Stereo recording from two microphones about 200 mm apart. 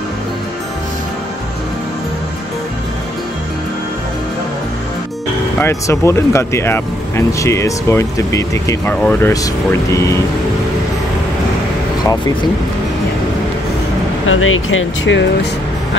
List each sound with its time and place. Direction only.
5.6 s speech: 15° left (ahead or behind)
14.2 s speech: 90° left; by 15.2 s 75° left (ahead or behind)